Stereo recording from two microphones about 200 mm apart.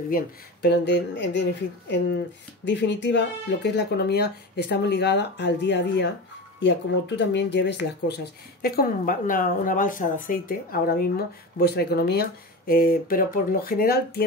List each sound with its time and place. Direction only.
0.1 s speech: 55° left (ahead or behind)